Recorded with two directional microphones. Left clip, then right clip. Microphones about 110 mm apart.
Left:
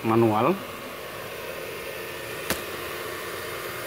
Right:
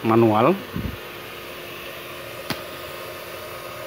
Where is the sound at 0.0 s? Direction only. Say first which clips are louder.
Right 4 dB; 35° right (ahead or behind).